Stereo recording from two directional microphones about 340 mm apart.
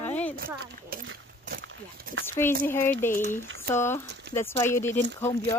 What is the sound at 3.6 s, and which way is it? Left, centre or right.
Speech, centre.